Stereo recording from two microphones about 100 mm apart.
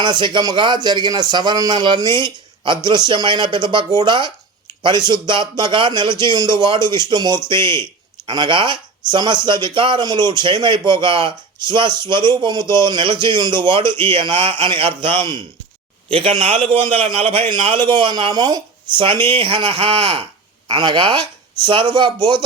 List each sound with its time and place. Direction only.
0.0 s speech: 50° right (ahead or behind)
20.7 s speech: 50° right (ahead or behind)